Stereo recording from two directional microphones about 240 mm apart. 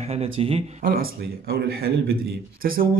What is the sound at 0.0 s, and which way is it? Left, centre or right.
A man's voice, right.